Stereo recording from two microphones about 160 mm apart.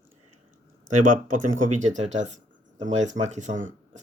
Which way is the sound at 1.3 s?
50° right (ahead or behind).